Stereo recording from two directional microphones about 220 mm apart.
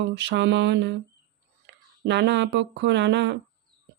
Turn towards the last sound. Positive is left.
turn(degrees=-50)  # may be behind; listen again after turning